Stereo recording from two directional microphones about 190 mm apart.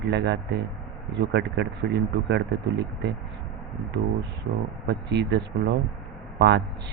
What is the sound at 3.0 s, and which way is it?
Speech, 65° right (ahead or behind).